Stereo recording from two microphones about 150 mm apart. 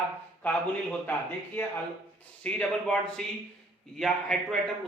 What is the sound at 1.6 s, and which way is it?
A man's voice, 15° left (ahead or behind).